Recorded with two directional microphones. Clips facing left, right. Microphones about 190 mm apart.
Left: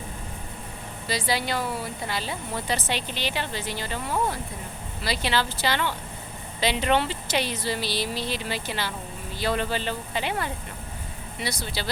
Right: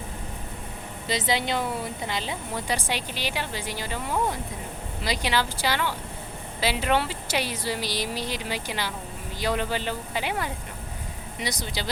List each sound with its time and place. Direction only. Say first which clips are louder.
1.0 s a woman's voice: right 1 dB; 20° right (ahead or behind)